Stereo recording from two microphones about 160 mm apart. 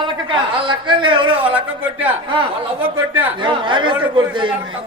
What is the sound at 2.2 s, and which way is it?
A man's voice, 30° right (ahead or behind).